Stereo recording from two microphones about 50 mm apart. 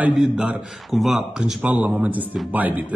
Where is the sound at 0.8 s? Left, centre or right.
Centre.